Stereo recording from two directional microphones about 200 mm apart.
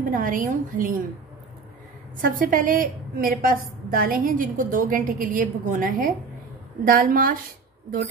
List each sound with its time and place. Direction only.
0.1 s a woman's voice: 40° right (ahead or behind)
2.2 s a woman's voice: 45° right (ahead or behind)